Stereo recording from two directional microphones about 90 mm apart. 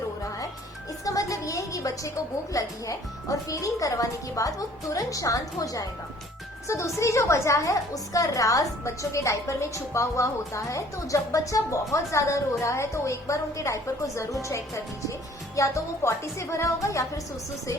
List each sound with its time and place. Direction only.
1.0 s a woman's voice: 40° left (ahead or behind)